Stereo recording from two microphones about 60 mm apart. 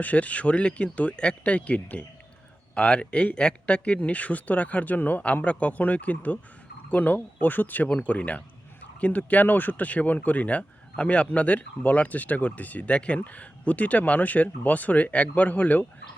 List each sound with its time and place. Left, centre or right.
0.0 s speech: left